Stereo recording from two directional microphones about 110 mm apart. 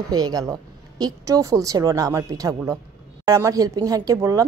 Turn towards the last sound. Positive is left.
turn(degrees=-30)  # may be behind; listen again after turning